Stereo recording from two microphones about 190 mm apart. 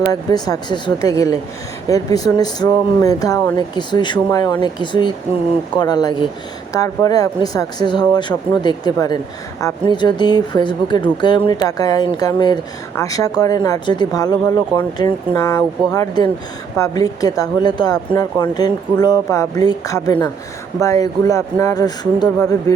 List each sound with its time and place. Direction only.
0.1 s speech: 20° left (ahead or behind)